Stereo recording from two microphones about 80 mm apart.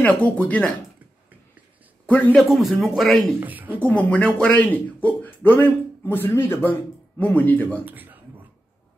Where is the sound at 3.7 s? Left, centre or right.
Centre.